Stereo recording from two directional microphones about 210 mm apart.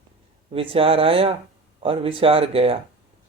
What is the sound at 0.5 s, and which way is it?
Speech, 25° right (ahead or behind).